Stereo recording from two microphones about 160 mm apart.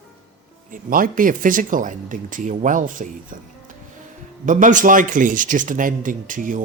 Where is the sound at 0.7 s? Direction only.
60° right (ahead or behind).